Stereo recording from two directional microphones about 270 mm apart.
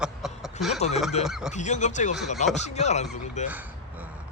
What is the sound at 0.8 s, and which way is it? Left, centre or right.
Speech, left.